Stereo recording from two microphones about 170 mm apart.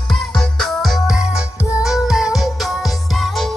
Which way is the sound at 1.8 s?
Centre (ahead or behind).